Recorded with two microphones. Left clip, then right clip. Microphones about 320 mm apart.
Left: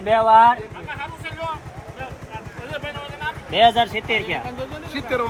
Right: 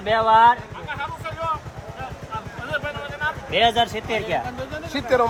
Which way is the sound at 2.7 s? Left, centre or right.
Centre.